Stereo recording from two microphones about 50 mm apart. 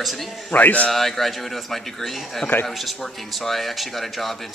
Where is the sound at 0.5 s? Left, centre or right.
Left.